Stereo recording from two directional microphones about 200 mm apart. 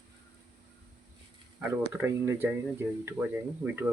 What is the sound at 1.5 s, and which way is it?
Speech, 10° right (ahead or behind).